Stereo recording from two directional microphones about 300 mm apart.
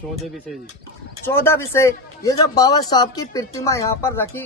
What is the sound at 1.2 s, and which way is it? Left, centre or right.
A man's voice, centre.